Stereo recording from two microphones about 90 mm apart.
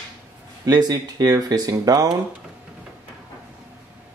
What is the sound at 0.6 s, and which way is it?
Speech, 45° right (ahead or behind).